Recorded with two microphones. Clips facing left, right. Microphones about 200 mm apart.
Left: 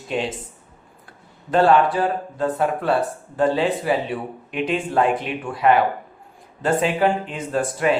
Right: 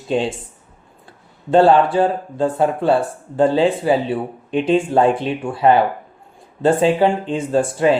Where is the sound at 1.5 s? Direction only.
30° right (ahead or behind).